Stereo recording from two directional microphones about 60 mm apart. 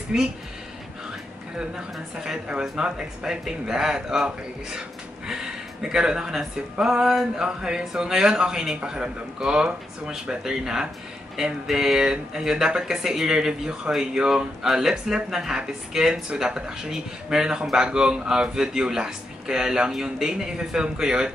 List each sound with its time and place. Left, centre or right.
2.2 s speech: centre